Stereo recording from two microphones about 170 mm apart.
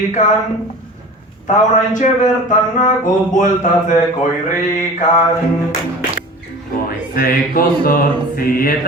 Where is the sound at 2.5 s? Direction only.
50° left (ahead or behind).